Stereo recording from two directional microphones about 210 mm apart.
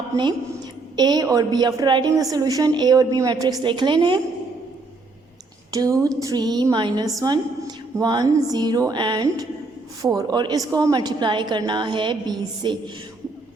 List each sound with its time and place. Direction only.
0.2 s a woman's voice: 20° right (ahead or behind)
5.7 s a woman's voice: 15° right (ahead or behind)